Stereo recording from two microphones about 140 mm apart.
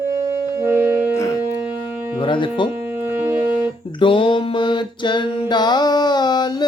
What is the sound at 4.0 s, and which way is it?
Music, 35° left (ahead or behind).